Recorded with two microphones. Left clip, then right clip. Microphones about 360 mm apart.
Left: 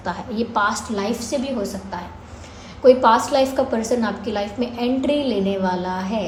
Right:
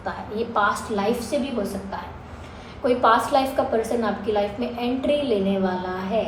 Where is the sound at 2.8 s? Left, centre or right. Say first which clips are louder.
Left 5 dB; left.